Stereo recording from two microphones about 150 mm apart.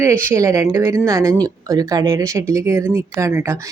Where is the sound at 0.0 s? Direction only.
20° right (ahead or behind).